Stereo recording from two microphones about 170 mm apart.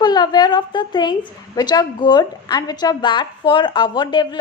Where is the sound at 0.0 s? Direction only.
25° left (ahead or behind).